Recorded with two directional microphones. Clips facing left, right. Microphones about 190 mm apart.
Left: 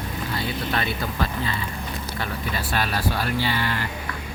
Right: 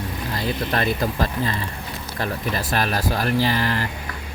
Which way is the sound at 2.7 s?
40° right (ahead or behind).